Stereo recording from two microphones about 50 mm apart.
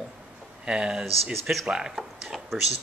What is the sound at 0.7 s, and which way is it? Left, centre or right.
Speech, centre.